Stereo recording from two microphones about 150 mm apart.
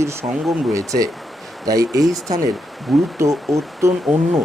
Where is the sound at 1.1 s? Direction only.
Centre (ahead or behind).